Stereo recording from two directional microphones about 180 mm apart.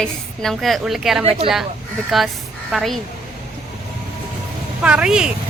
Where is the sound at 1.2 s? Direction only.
30° right (ahead or behind).